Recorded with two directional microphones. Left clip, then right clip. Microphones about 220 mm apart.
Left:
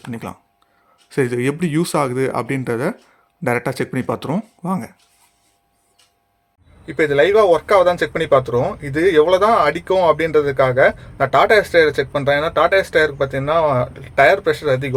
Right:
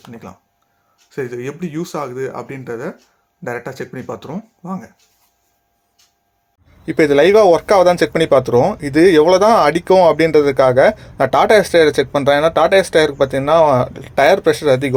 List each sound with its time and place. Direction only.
0.1 s speech: 35° left (ahead or behind)
6.8 s speech: 20° right (ahead or behind)